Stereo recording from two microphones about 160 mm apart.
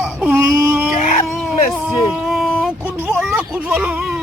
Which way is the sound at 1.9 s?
5° right (ahead or behind).